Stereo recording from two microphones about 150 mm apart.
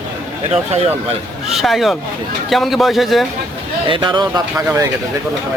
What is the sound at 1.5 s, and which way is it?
Speech, centre (ahead or behind).